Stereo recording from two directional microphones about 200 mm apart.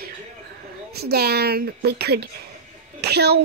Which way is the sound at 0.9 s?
50° right (ahead or behind).